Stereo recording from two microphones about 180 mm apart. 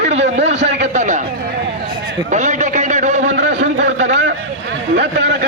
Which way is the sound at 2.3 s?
40° right (ahead or behind).